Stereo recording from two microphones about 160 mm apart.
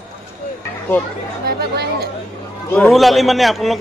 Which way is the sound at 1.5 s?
75° right (ahead or behind).